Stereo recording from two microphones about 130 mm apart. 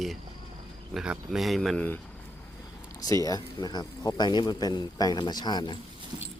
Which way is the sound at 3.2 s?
30° left (ahead or behind).